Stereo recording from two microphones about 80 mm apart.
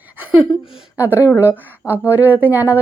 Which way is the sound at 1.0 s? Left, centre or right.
Right.